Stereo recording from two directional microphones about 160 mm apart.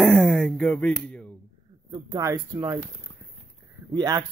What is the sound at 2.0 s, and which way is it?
Speech, 20° right (ahead or behind).